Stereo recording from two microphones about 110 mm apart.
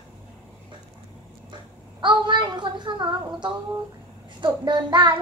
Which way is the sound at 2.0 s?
45° right (ahead or behind).